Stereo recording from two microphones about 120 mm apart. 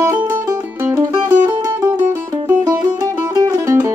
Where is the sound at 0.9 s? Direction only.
20° right (ahead or behind).